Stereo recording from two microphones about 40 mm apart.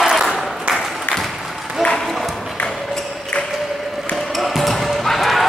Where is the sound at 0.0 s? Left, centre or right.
Centre.